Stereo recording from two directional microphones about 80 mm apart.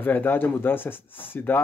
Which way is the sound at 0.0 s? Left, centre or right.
Left.